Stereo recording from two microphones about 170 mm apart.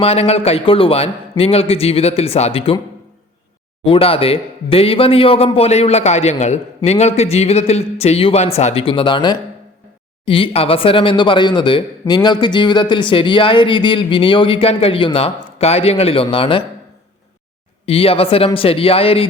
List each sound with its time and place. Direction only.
0.0 s speech: 35° left (ahead or behind)
3.8 s speech: 35° left (ahead or behind)
17.8 s speech: 35° left (ahead or behind)